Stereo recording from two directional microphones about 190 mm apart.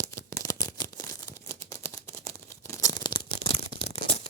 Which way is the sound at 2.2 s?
30° right (ahead or behind).